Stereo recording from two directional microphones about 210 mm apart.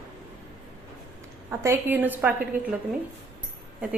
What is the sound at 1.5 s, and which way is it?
A woman's voice, 10° right (ahead or behind).